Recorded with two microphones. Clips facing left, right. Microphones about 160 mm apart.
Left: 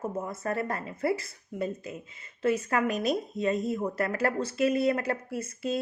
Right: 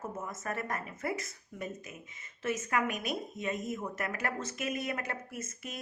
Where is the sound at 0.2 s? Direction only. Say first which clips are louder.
Left 7 dB; 30° left (ahead or behind).